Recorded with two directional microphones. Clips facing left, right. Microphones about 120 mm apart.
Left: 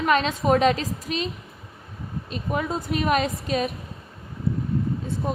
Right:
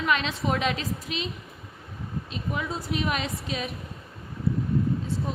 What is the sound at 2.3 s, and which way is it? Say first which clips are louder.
A woman's voice: left 6 dB; 50° left (ahead or behind).